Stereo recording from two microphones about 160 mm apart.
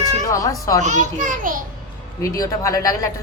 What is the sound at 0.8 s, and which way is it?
Speech, 50° right (ahead or behind).